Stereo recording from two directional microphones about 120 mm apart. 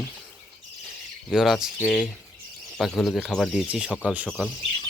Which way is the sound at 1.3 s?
5° right (ahead or behind).